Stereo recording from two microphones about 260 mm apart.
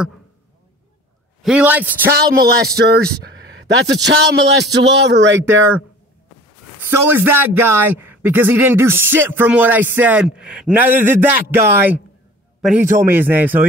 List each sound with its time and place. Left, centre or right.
1.4 s a man's voice: centre
2.3 s a man's voice: right
5.5 s a man's voice: centre